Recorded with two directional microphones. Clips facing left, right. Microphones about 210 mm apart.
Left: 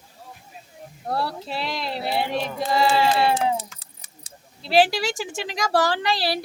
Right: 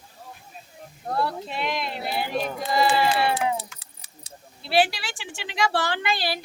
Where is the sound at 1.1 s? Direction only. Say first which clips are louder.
Even; 35° left (ahead or behind).